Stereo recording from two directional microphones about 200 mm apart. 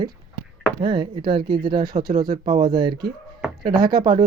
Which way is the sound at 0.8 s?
25° right (ahead or behind).